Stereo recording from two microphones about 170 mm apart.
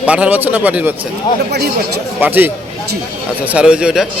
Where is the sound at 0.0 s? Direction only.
5° right (ahead or behind).